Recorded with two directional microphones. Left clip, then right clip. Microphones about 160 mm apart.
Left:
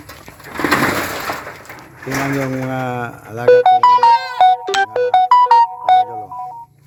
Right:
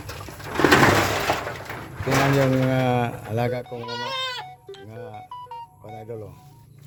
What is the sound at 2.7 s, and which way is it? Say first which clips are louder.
Speech: left 1 dB; 5° left (ahead or behind).